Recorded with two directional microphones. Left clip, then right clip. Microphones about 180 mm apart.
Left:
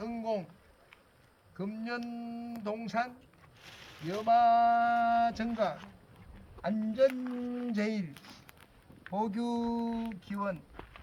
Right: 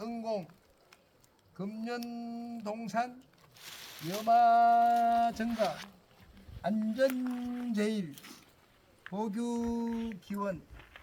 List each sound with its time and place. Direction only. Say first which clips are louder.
0.0 s a sound: left 1 dB; centre (ahead or behind)
1.5 s speech: left 1 dB; 5° left (ahead or behind)
3.6 s a sound: right 4 dB; 45° right (ahead or behind)
4.3 s speech: right 1 dB; 25° left (ahead or behind)
7.1 s speech: right 1 dB; 25° right (ahead or behind)
7.7 s speech: right 3 dB; 15° left (ahead or behind)
9.0 s speech: left 3 dB; 5° right (ahead or behind)